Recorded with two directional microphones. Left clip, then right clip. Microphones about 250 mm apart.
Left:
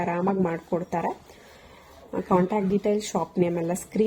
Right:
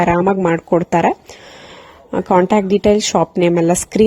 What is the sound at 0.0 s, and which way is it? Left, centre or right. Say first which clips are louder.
Speech: right 12 dB; right.